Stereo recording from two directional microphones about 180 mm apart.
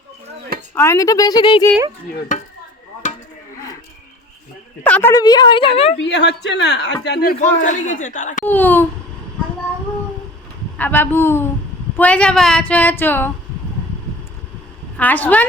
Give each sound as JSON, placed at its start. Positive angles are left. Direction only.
{"t": 0.7, "sound": "a woman's voice", "side_deg": 15}
{"t": 4.9, "sound": "female singing", "side_deg": 10}
{"t": 5.1, "sound": "a woman's voice", "side_deg": 20}
{"t": 6.0, "sound": "a woman's voice", "side_deg": 75}
{"t": 7.0, "sound": "speech", "side_deg": 60}
{"t": 8.4, "sound": "female singing", "side_deg": 10}
{"t": 10.8, "sound": "female singing", "side_deg": 10}
{"t": 14.9, "sound": "female singing", "side_deg": 10}